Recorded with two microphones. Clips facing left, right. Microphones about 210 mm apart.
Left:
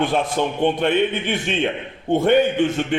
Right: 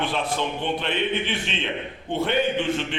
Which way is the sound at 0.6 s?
50° left (ahead or behind).